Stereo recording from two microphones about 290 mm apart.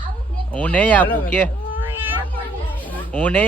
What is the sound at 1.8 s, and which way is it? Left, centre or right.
Cat, centre.